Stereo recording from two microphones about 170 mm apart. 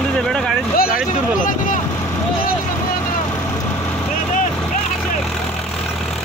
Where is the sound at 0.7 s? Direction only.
60° left (ahead or behind).